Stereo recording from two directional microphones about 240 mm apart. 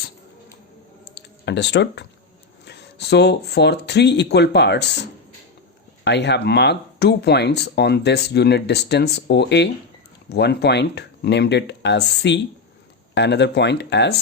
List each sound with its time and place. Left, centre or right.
1.1 s speech: left
6.1 s speech: left